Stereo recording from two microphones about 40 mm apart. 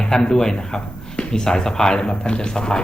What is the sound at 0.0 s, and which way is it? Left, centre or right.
Speech, centre.